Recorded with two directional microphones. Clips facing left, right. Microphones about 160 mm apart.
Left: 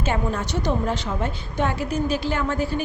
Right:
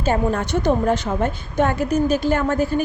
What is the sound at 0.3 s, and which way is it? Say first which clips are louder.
A woman's voice: right 5 dB; 55° right (ahead or behind).